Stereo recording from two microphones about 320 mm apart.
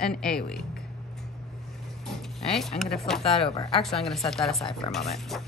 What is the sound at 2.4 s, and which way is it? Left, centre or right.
Speech, centre.